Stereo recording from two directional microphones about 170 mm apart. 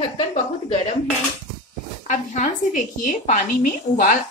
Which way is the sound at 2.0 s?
45° left (ahead or behind).